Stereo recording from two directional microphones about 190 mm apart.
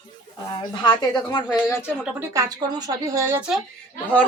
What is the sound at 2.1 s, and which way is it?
Speech, 20° right (ahead or behind).